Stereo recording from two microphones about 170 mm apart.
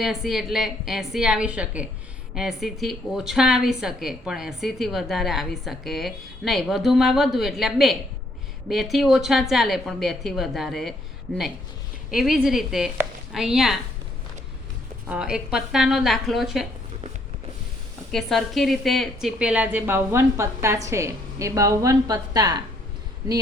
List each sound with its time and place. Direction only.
0.0 s a woman's voice: centre (ahead or behind)
15.1 s a woman's voice: 5° right (ahead or behind)
18.1 s a woman's voice: centre (ahead or behind); by 22.6 s 20° right (ahead or behind)